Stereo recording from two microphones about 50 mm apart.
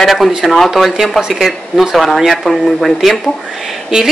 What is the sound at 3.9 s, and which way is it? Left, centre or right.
Speech, centre.